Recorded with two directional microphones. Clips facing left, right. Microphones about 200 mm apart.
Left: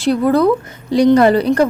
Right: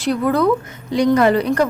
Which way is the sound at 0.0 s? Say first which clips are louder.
Left 4 dB; 35° left (ahead or behind).